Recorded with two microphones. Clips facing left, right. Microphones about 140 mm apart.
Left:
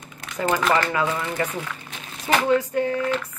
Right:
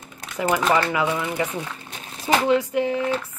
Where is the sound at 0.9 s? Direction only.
15° right (ahead or behind).